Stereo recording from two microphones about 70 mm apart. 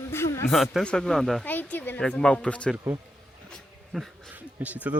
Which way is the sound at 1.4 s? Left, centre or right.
Left.